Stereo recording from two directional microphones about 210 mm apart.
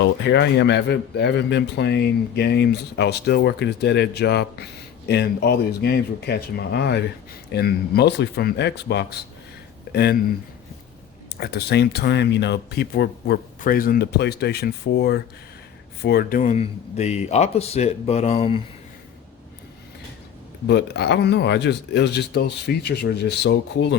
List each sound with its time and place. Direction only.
0.3 s speech: 55° left (ahead or behind)
11.3 s speech: 50° left (ahead or behind); by 18.6 s 25° left (ahead or behind)
20.7 s speech: 55° left (ahead or behind)